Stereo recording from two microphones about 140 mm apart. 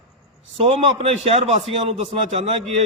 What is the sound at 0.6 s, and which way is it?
A man's voice, 45° right (ahead or behind).